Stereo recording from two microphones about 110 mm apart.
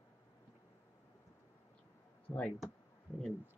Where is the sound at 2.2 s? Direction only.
15° left (ahead or behind).